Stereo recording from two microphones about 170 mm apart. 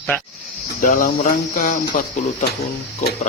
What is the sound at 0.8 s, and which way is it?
Speech, 50° left (ahead or behind).